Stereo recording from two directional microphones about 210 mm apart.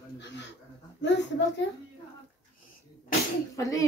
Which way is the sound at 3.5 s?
15° left (ahead or behind).